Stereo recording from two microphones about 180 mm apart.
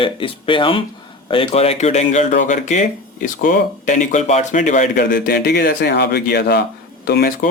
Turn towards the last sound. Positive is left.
turn(degrees=55)  # may be behind; listen again after turning